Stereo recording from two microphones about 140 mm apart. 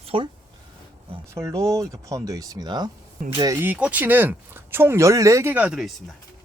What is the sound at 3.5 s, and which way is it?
Speech, 15° right (ahead or behind).